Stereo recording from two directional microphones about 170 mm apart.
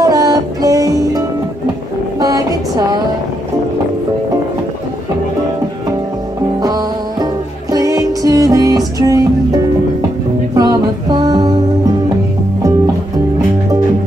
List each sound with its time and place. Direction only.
0.0 s music: 20° right (ahead or behind)
2.1 s a sound: 20° right (ahead or behind)
6.6 s music: 20° right (ahead or behind)